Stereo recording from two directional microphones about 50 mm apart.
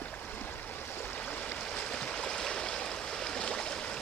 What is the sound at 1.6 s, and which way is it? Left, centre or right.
Stream, centre.